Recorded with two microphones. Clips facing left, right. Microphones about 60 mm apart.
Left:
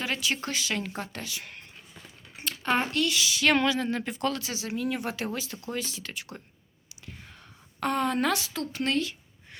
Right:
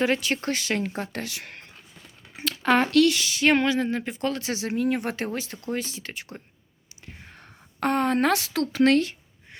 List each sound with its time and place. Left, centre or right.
0.0 s speech: right
2.6 s speech: right
3.2 s speech: right
3.4 s speech: right
4.4 s speech: right
7.0 s whispering: right
7.3 s speech: right